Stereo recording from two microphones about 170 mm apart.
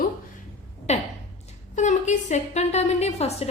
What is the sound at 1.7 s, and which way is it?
A woman's voice, 45° left (ahead or behind).